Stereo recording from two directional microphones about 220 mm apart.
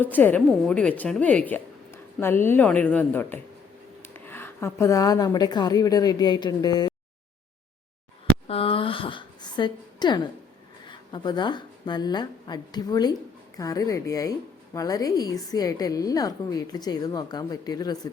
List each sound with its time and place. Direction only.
0.0 s a woman's voice: 10° left (ahead or behind)
8.4 s a sound: 25° left (ahead or behind)
10.8 s a woman's voice: 20° left (ahead or behind)